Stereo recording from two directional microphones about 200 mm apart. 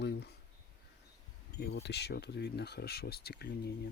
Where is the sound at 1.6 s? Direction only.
55° left (ahead or behind).